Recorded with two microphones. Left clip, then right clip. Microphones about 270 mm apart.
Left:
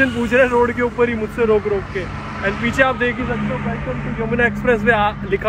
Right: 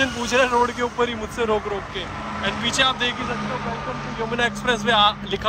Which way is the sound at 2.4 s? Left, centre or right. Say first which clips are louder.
Left 4 dB; right.